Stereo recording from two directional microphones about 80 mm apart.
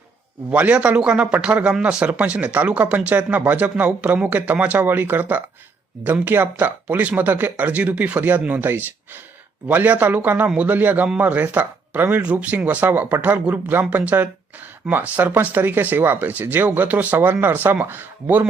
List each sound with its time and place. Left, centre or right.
0.5 s speech: centre